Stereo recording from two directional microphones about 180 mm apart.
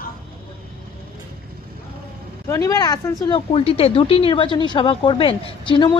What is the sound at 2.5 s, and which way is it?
Speech, 20° left (ahead or behind).